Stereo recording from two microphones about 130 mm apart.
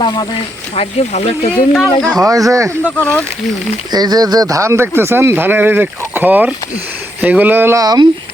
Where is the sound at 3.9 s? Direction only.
30° right (ahead or behind).